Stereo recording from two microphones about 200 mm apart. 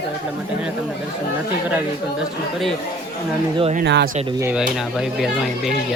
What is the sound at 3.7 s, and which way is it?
Speech, 55° right (ahead or behind).